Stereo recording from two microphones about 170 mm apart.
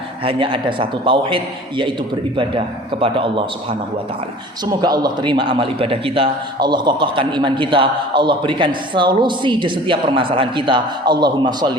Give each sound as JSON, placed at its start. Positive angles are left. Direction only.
{"t": 0.3, "sound": "a man's voice", "side_deg": -30}